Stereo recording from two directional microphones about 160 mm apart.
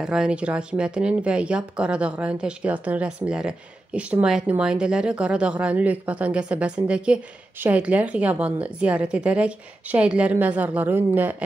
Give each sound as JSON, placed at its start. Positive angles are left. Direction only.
{"t": 0.0, "sound": "speech", "side_deg": -5}